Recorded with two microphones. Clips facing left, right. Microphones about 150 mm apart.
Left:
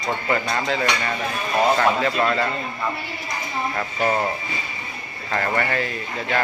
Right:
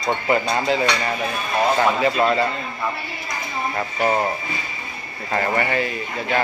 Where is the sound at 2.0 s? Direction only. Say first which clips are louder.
Right 3 dB; 10° right (ahead or behind).